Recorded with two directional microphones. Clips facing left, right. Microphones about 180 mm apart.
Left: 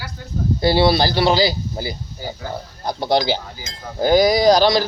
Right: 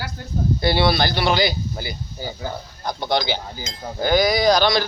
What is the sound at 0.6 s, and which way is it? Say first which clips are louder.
Speech: left 4 dB; 35° left (ahead or behind).